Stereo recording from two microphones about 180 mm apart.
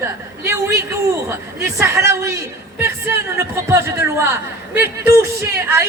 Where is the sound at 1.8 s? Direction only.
15° right (ahead or behind).